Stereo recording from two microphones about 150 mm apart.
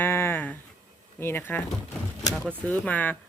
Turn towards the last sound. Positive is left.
turn(degrees=10)  # may be behind; listen again after turning